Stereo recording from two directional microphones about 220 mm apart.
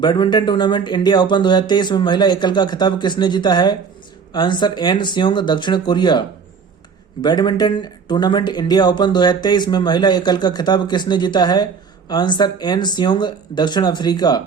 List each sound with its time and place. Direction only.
0.0 s speech: 20° left (ahead or behind)